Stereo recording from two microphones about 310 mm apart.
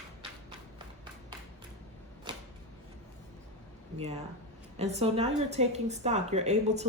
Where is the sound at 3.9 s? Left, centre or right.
Centre.